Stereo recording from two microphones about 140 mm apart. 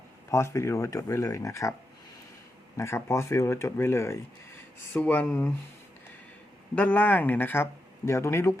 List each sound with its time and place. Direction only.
0.3 s speech: 20° left (ahead or behind)
2.7 s speech: 20° left (ahead or behind)
6.7 s speech: 10° left (ahead or behind)